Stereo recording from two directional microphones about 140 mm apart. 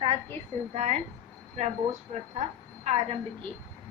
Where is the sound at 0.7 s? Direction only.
60° right (ahead or behind).